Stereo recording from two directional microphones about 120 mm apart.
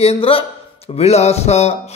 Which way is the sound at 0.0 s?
55° left (ahead or behind).